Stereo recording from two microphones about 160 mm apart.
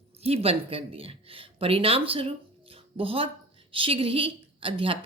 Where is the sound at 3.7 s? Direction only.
35° right (ahead or behind).